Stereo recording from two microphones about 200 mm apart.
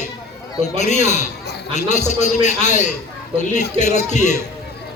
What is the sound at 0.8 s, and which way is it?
A man's voice, 35° left (ahead or behind).